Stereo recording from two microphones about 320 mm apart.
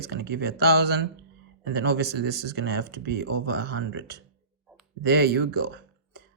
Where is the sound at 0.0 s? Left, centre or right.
Right.